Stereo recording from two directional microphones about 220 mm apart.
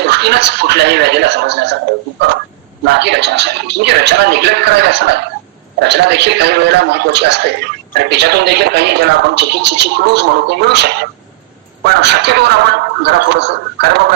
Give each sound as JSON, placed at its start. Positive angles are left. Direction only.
{"t": 0.0, "sound": "speech", "side_deg": -50}
{"t": 2.8, "sound": "speech", "side_deg": -50}